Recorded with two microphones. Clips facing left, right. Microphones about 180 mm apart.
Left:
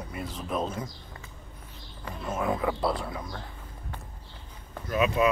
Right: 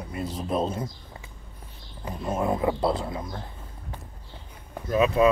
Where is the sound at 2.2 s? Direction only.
30° right (ahead or behind).